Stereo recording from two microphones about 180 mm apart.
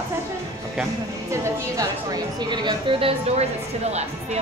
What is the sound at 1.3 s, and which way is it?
A woman's voice, 20° right (ahead or behind).